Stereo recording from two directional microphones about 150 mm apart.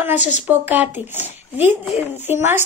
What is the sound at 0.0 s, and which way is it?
Speech, 10° right (ahead or behind).